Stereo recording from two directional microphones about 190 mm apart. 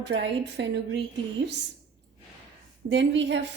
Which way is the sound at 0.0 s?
65° right (ahead or behind).